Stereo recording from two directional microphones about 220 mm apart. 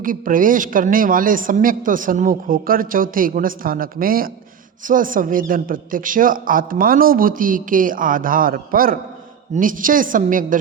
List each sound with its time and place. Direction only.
0.0 s a man's voice: 40° right (ahead or behind)